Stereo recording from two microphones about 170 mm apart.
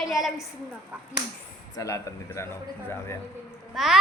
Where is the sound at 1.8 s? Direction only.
20° left (ahead or behind).